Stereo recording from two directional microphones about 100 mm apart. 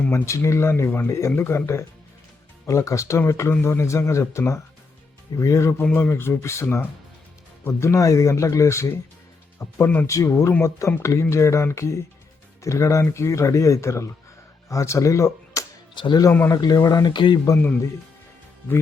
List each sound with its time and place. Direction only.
0.3 s speech: 30° left (ahead or behind)
5.8 s speech: 20° left (ahead or behind)
16.0 s speech: 50° left (ahead or behind)
16.5 s speech: 40° left (ahead or behind)